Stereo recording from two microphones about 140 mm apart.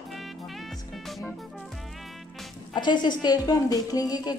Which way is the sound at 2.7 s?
30° left (ahead or behind).